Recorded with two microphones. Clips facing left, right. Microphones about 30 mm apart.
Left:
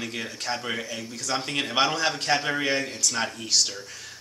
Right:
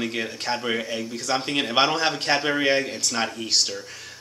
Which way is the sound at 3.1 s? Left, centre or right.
Centre.